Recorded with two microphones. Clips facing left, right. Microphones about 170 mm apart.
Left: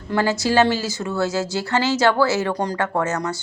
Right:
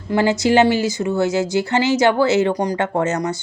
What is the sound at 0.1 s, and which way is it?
Speech, 15° right (ahead or behind).